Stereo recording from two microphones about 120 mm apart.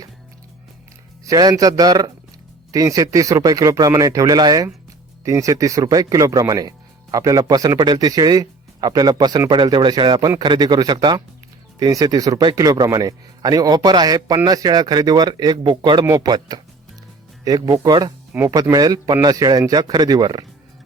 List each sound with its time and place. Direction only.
1.2 s speech: 30° right (ahead or behind)
18.3 s speech: 20° right (ahead or behind)